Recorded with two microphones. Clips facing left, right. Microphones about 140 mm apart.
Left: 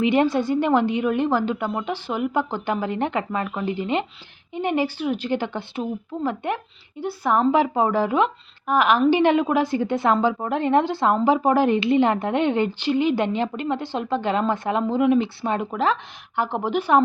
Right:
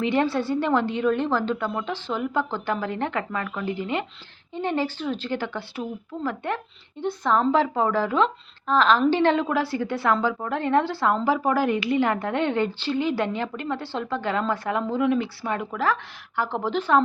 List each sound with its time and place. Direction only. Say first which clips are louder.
0.0 s a woman's voice: left 4 dB; 15° left (ahead or behind)